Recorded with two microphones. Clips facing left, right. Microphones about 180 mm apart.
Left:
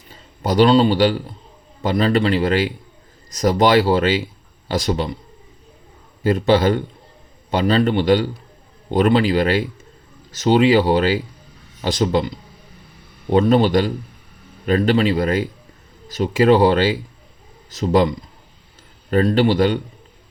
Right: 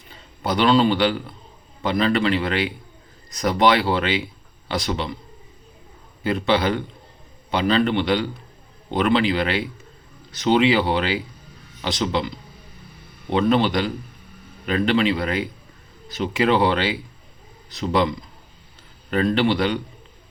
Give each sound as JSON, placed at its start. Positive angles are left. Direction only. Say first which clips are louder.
{"t": 0.1, "sound": "a man's voice", "louder": "left 4 dB", "side_deg": 40}
{"t": 6.2, "sound": "a man's voice", "louder": "left 5 dB", "side_deg": 40}
{"t": 13.3, "sound": "a man's voice", "louder": "left 4 dB", "side_deg": 40}
{"t": 19.1, "sound": "a man's voice", "louder": "left 4 dB", "side_deg": 40}